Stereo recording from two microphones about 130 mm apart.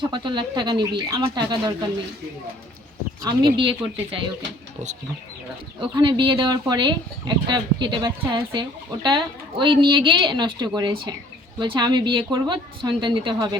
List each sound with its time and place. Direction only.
0.1 s speech: 35° right (ahead or behind)
3.2 s speech: 40° right (ahead or behind)
5.8 s speech: 40° right (ahead or behind)